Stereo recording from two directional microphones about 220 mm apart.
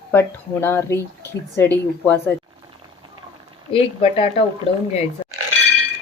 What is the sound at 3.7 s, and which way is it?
Speech, 25° left (ahead or behind).